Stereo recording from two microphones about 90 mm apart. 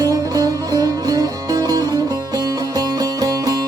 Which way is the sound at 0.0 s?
40° right (ahead or behind).